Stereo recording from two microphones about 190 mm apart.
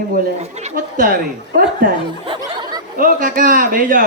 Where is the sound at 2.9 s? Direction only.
45° right (ahead or behind).